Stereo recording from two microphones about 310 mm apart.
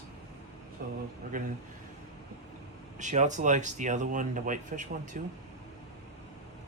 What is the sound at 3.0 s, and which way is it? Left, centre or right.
Speech, right.